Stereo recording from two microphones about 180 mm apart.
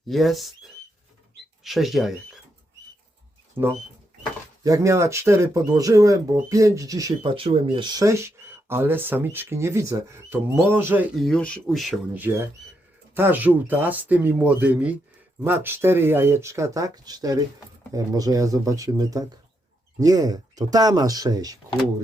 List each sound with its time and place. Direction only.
0.1 s speech: centre (ahead or behind)
1.6 s speech: centre (ahead or behind)
3.6 s speech: 10° right (ahead or behind)
7.3 s speech: 30° right (ahead or behind); by 11.1 s 10° right (ahead or behind)
11.2 s speech: 5° left (ahead or behind); by 21.6 s 20° right (ahead or behind)